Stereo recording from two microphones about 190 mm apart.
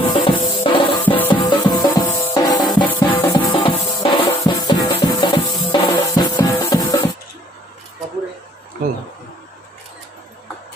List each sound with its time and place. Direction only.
0.0 s music: 30° left (ahead or behind)
1.0 s music: 10° left (ahead or behind)
1.3 s music: 25° left (ahead or behind)